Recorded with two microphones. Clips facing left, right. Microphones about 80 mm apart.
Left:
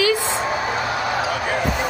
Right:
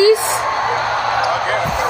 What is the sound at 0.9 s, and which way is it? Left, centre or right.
Basketball bounce, centre.